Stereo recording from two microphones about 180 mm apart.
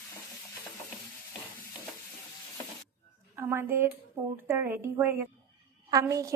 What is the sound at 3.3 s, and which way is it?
A woman's voice, 15° right (ahead or behind).